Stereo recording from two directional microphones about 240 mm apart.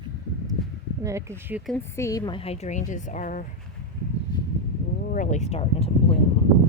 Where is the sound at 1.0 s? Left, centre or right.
Centre; by 3.5 s left.